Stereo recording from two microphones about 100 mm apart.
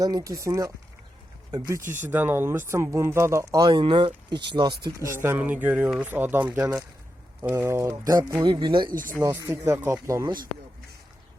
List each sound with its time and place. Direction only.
0.0 s speech: 40° right (ahead or behind)
1.8 s speech: 20° right (ahead or behind)
3.7 s speech: 55° right (ahead or behind)
5.0 s speech: 25° right (ahead or behind)
8.4 s speech: 55° right (ahead or behind)
9.1 s speech: 25° right (ahead or behind)